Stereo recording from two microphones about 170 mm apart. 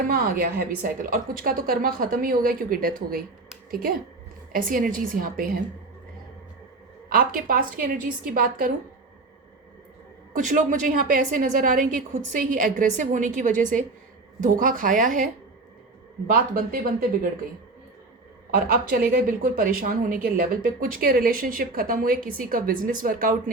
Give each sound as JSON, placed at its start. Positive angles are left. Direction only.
{"t": 0.1, "sound": "speech", "side_deg": -60}
{"t": 4.5, "sound": "speech", "side_deg": -55}
{"t": 7.1, "sound": "speech", "side_deg": -55}
{"t": 10.3, "sound": "a woman's voice", "side_deg": -50}
{"t": 18.5, "sound": "speech", "side_deg": -60}